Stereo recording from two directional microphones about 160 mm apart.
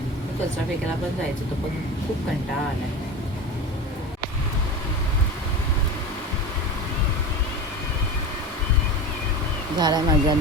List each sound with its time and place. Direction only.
9.7 s speech: 25° right (ahead or behind)